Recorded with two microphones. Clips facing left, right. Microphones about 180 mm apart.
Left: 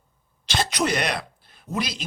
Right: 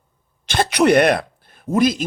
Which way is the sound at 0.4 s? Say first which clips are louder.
Right 9 dB; 55° right (ahead or behind).